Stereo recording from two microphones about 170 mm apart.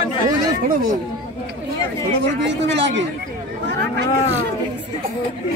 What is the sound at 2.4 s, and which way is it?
Speech, 90° right.